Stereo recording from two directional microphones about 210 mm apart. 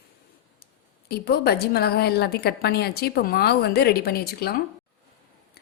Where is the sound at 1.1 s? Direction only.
50° left (ahead or behind).